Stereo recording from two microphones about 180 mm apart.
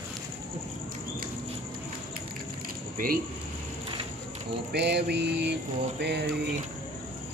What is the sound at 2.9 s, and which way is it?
Speech, 50° right (ahead or behind).